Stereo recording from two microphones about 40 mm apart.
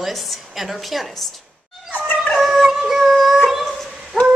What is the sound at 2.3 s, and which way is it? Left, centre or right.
Music, centre.